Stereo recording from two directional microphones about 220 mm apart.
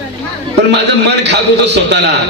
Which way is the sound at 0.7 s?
50° right (ahead or behind).